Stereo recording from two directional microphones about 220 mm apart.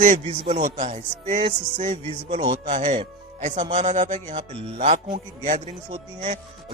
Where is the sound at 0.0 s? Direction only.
30° right (ahead or behind).